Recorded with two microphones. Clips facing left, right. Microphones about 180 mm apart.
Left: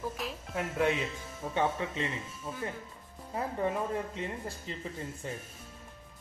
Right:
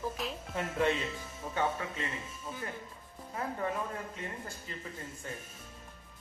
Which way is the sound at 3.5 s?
25° left (ahead or behind).